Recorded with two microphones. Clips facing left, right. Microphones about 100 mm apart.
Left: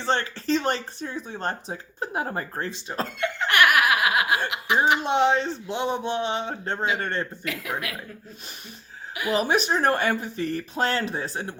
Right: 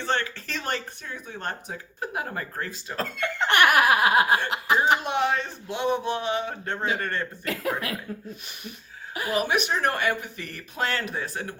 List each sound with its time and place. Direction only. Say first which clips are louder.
0.0 s speech: left 2 dB; 30° left (ahead or behind)
3.3 s laughter: right 1 dB; 30° right (ahead or behind)
4.4 s speech: right 1 dB; 35° right (ahead or behind)
5.0 s speech: left 4 dB; 25° left (ahead or behind)
7.4 s speech: right 2 dB; 35° right (ahead or behind)
9.3 s speech: left 2 dB; 30° left (ahead or behind)